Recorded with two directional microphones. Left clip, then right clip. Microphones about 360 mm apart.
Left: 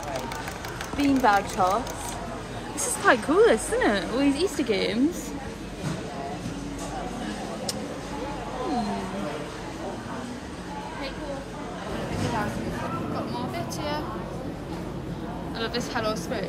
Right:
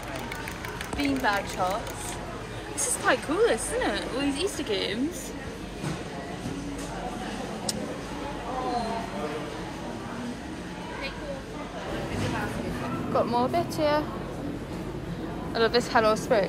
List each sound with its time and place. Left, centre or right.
0.9 s speech: left
3.1 s speech: left
13.1 s speech: centre
15.5 s a woman's voice: centre